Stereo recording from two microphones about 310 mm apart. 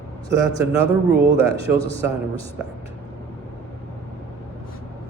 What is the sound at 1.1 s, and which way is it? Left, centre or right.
Speech, right.